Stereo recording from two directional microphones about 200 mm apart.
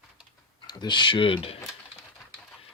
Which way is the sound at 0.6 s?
20° left (ahead or behind).